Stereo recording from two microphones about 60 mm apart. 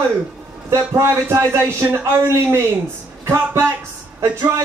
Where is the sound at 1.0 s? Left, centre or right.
Right.